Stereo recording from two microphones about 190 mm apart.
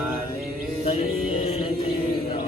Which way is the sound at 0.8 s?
35° left (ahead or behind).